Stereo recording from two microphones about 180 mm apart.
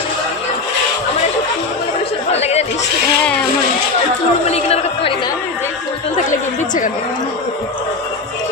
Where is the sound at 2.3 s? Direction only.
35° left (ahead or behind).